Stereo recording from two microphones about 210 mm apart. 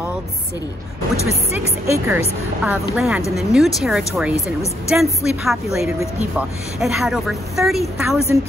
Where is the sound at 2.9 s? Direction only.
Centre (ahead or behind).